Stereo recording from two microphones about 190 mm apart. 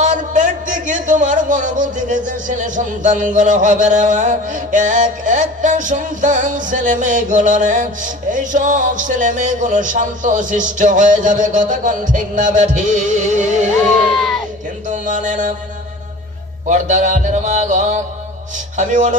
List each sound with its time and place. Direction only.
0.0 s a man's voice: 40° right (ahead or behind)
14.1 s a sound: centre (ahead or behind)
14.9 s mantra: 40° right (ahead or behind)
16.6 s a man's voice: 40° right (ahead or behind)